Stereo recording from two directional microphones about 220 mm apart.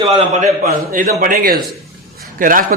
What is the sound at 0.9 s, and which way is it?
A man's voice, 40° right (ahead or behind).